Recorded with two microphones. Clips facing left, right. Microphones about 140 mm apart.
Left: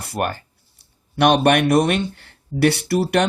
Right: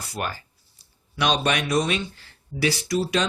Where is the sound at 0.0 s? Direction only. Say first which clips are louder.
Left 7 dB; 55° left (ahead or behind).